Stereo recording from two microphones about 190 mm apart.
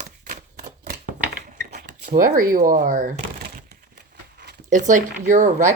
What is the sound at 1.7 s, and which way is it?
Speech, 45° right (ahead or behind).